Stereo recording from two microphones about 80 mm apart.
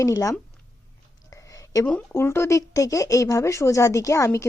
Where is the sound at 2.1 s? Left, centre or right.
Left.